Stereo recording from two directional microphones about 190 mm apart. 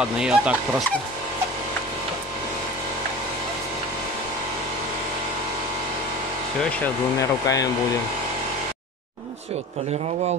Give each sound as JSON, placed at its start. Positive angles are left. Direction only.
{"t": 0.2, "sound": "speech", "side_deg": -5}
{"t": 6.8, "sound": "speech", "side_deg": 15}